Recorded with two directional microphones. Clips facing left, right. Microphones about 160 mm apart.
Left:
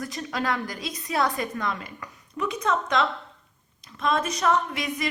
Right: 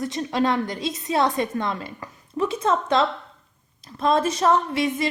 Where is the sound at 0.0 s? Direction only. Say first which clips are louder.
Right 6 dB; 25° right (ahead or behind).